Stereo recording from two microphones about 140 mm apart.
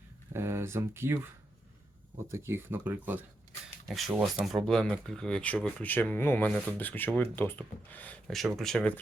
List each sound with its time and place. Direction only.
0.3 s speech: 20° right (ahead or behind)
2.3 s speech: 20° right (ahead or behind)
3.8 s speech: centre (ahead or behind)
8.4 s speech: centre (ahead or behind)